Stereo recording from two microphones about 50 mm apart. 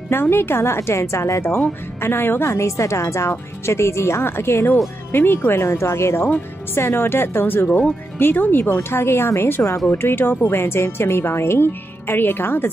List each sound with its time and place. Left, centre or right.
0.1 s speech: left
2.0 s speech: left
5.1 s speech: left
9.6 s speech: left